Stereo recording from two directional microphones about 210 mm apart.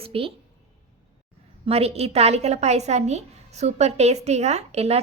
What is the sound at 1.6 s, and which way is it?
A woman's voice, 30° right (ahead or behind).